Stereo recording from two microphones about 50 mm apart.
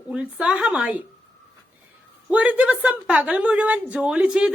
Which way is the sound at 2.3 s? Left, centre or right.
Right.